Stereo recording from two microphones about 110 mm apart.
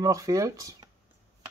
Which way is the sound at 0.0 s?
30° right (ahead or behind).